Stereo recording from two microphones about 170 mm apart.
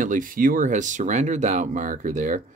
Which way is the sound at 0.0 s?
50° right (ahead or behind).